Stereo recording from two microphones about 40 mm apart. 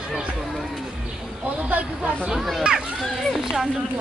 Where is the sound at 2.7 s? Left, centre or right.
Right.